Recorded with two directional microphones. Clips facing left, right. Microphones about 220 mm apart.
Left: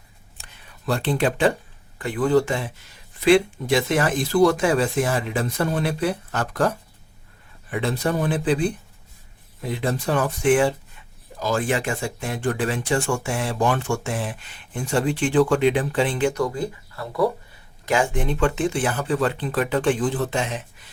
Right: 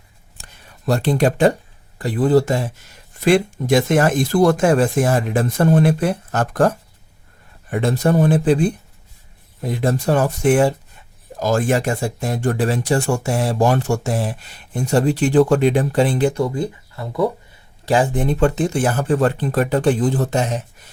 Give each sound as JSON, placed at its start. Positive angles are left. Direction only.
{"t": 0.4, "sound": "speech", "side_deg": -40}
{"t": 16.4, "sound": "speech", "side_deg": -25}
{"t": 17.8, "sound": "speech", "side_deg": -35}